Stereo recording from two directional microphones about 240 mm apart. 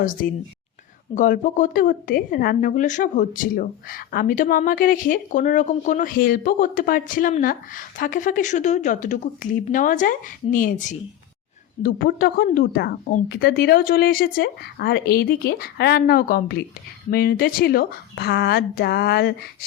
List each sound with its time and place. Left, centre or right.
1.1 s speech: left